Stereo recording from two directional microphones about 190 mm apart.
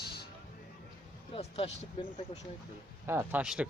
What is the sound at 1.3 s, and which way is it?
Speech, 30° left (ahead or behind).